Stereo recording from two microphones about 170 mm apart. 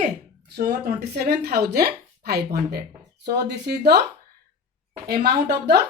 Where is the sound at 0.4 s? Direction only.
60° right (ahead or behind).